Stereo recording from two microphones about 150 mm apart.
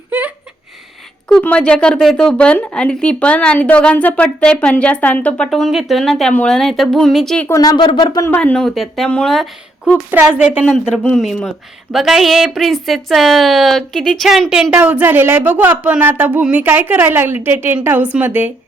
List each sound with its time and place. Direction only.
0.1 s a sound: 10° right (ahead or behind)
1.3 s speech: 10° left (ahead or behind)
7.4 s speech: 20° left (ahead or behind)
8.4 s speech: 5° left (ahead or behind)
10.1 s speech: 10° right (ahead or behind)
10.8 s speech: centre (ahead or behind)